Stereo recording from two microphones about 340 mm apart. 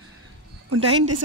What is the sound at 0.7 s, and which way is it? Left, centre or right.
Speech, right.